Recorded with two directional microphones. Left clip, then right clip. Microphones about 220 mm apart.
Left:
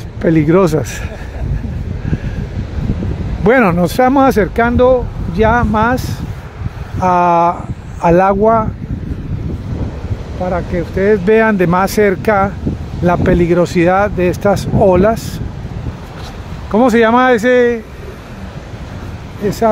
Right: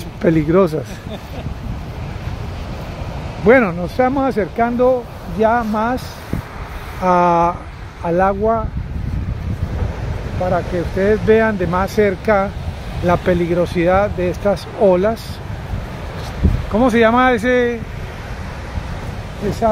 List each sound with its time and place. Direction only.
0.2 s speech: 25° left (ahead or behind)
0.5 s speech: 40° left (ahead or behind)
3.4 s speech: 50° left (ahead or behind)
7.0 s speech: 25° left (ahead or behind)
8.0 s speech: 45° left (ahead or behind)
10.5 s speech: 40° left (ahead or behind)
11.3 s speech: 55° left (ahead or behind); by 15.1 s 30° left (ahead or behind)
16.7 s speech: 45° left (ahead or behind)